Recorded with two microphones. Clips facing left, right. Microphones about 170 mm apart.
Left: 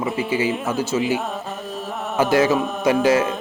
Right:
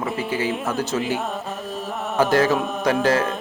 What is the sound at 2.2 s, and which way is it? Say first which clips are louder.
Music: left 1 dB; 10° left (ahead or behind).